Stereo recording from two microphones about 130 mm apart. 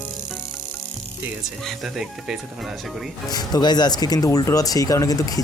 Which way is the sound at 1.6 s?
Centre (ahead or behind).